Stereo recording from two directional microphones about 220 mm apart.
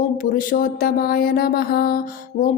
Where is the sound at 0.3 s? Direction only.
40° left (ahead or behind).